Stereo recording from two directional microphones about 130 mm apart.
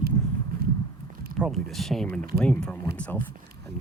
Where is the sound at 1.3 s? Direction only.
Centre (ahead or behind).